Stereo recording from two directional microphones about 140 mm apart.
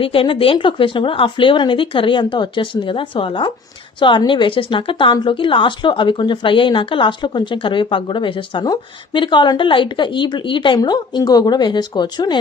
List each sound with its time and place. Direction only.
0.0 s a woman's voice: 40° left (ahead or behind)